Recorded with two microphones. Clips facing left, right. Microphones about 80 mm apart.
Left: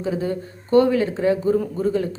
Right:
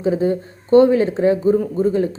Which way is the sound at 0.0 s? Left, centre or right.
Right.